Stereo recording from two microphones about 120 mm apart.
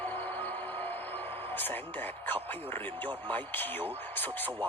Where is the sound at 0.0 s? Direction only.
15° left (ahead or behind).